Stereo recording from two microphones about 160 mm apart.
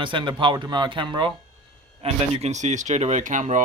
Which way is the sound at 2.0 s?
40° right (ahead or behind).